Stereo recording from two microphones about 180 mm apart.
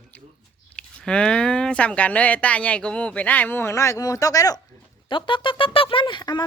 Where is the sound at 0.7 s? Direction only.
5° left (ahead or behind).